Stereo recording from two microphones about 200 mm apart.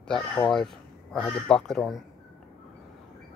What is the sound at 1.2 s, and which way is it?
Speech, 5° left (ahead or behind).